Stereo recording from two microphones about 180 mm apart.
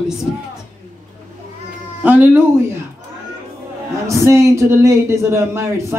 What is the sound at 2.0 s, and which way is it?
Speech, 10° right (ahead or behind).